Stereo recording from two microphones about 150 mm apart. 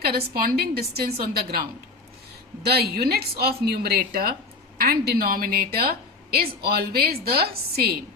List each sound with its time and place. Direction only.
0.3 s a woman's voice: 85° right
2.6 s a woman's voice: 90° right